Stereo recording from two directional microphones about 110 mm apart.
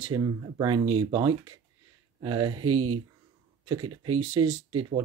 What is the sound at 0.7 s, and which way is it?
Speech, 55° right (ahead or behind).